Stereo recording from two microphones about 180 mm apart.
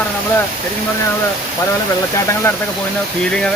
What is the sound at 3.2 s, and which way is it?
Speech, 5° left (ahead or behind).